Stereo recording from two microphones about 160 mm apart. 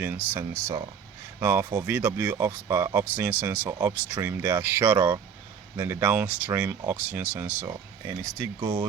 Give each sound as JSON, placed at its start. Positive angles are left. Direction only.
{"t": 0.0, "sound": "speech", "side_deg": -10}
{"t": 8.6, "sound": "speech", "side_deg": -30}